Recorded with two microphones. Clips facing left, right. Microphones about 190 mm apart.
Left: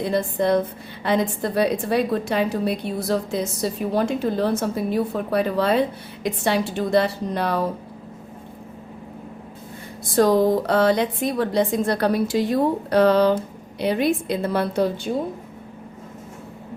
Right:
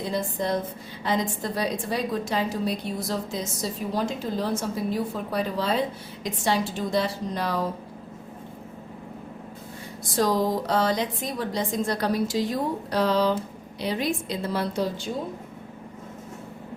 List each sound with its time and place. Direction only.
0.0 s a woman's voice: 60° left (ahead or behind)
10.2 s a woman's voice: 55° left (ahead or behind)